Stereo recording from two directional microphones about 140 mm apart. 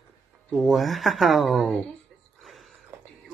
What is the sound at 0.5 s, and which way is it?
Speech, centre (ahead or behind).